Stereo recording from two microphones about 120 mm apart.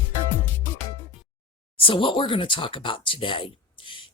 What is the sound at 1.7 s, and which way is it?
Speech, 45° left (ahead or behind).